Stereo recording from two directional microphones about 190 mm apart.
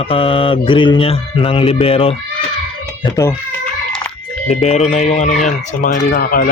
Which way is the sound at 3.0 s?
15° left (ahead or behind).